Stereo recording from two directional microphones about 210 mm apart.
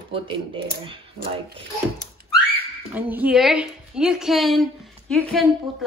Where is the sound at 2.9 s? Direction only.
10° right (ahead or behind).